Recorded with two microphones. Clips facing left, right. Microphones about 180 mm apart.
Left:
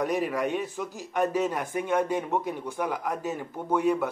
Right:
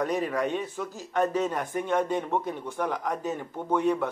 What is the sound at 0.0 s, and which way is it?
Speech, 10° left (ahead or behind).